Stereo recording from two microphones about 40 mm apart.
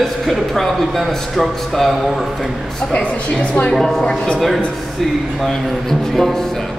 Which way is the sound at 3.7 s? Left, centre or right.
Centre.